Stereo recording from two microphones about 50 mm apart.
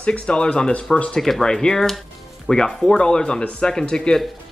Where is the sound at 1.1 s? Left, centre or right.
Centre.